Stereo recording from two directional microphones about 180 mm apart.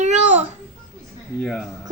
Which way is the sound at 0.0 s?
40° right (ahead or behind).